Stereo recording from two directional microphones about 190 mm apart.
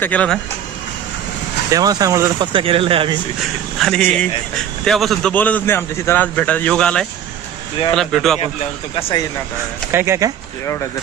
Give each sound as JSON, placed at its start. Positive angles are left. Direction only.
{"t": 0.0, "sound": "speech", "side_deg": 5}
{"t": 1.7, "sound": "speech", "side_deg": -20}
{"t": 3.8, "sound": "a man's voice", "side_deg": 5}
{"t": 9.0, "sound": "speech", "side_deg": 30}
{"t": 9.9, "sound": "speech", "side_deg": -15}